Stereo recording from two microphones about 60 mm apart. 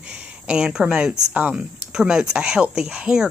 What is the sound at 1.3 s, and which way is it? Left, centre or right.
Speech, right.